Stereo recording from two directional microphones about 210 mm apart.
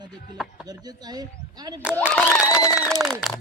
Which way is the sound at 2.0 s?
10° left (ahead or behind).